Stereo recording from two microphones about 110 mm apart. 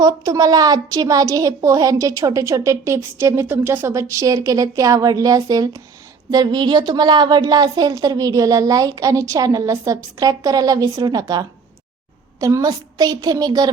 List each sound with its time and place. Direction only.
0.0 s a woman's voice: 35° right (ahead or behind)